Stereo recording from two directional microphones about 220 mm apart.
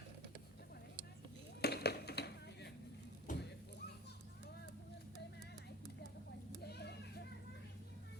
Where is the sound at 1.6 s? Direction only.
45° left (ahead or behind).